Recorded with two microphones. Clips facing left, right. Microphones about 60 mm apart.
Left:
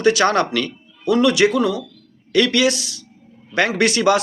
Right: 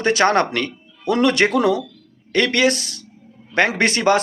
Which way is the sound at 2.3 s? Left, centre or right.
Right.